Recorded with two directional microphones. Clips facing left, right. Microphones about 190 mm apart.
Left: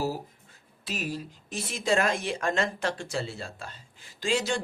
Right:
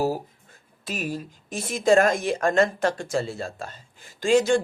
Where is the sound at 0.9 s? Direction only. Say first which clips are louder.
Right 3 dB; 50° right (ahead or behind).